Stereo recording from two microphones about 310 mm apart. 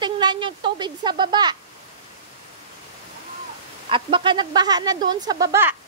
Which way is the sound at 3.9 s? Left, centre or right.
Centre.